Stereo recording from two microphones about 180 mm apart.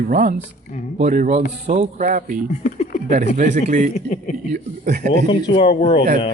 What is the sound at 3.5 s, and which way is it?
Speech, 45° right (ahead or behind).